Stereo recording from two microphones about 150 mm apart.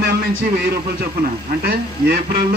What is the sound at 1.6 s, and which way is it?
Speech, 90° right.